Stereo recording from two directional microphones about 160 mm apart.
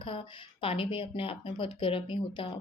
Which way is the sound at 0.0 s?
35° left (ahead or behind).